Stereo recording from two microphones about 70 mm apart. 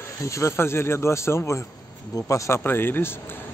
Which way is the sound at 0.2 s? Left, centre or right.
Left.